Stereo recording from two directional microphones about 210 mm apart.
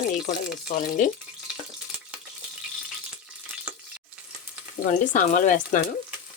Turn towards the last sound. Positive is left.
turn(degrees=40)  # may be behind; listen again after turning